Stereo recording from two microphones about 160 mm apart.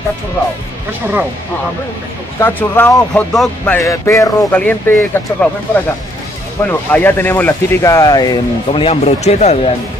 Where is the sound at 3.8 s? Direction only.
20° left (ahead or behind); by 9.6 s 45° left (ahead or behind).